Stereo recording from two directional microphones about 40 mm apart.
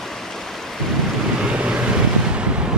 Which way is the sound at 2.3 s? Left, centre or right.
Right.